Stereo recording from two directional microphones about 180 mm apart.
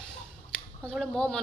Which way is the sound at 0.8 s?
5° left (ahead or behind).